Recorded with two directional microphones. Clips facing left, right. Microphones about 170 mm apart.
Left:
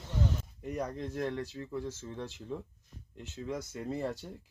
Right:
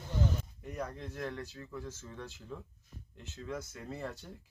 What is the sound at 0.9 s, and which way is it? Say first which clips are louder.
Speech: left 6 dB; 40° left (ahead or behind).